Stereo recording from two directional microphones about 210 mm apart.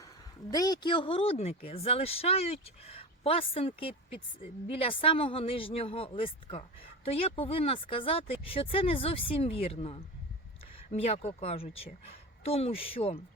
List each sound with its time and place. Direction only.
0.5 s a woman's voice: 20° left (ahead or behind)